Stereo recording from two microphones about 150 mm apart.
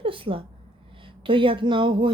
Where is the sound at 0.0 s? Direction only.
35° right (ahead or behind).